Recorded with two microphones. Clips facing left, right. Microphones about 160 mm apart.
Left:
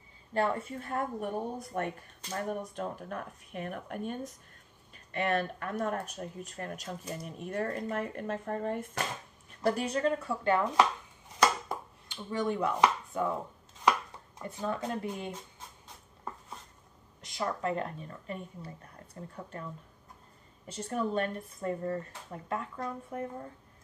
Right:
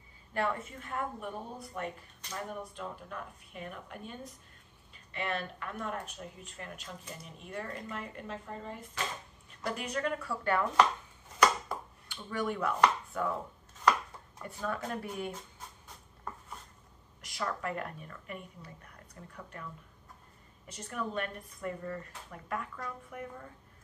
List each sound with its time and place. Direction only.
0.3 s speech: 30° left (ahead or behind); by 9.0 s 50° left (ahead or behind)
9.7 s speech: 30° left (ahead or behind)
11.7 s a sound: 20° left (ahead or behind)
12.8 s chopping: 20° left (ahead or behind)
14.4 s speech: 20° left (ahead or behind)
17.2 s speech: 25° left (ahead or behind)